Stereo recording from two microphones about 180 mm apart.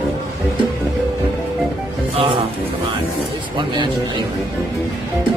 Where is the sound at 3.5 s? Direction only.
25° right (ahead or behind).